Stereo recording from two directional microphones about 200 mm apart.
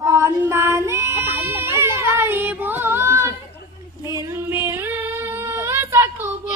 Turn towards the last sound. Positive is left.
turn(degrees=-10)  # may be behind; listen again after turning